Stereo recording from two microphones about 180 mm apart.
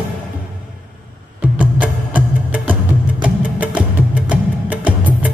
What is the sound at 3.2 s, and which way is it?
Music, 5° right (ahead or behind).